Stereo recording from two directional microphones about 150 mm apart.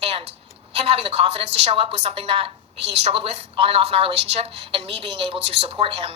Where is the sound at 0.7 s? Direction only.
45° right (ahead or behind).